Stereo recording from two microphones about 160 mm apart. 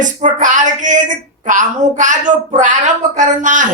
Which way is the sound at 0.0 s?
50° right (ahead or behind).